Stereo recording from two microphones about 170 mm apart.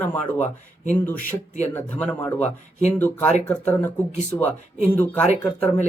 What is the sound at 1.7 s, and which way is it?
Speech, 10° left (ahead or behind).